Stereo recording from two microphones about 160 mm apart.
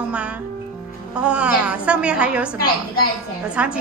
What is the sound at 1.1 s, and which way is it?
A woman's voice, 5° right (ahead or behind).